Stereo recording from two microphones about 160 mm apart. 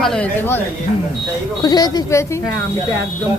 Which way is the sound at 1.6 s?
25° left (ahead or behind).